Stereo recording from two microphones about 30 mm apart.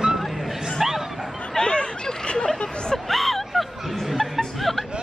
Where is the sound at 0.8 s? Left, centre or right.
Centre.